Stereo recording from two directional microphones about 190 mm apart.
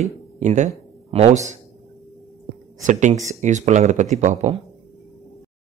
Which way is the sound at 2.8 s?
40° right (ahead or behind).